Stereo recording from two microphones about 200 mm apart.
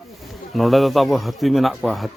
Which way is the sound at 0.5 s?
Centre (ahead or behind).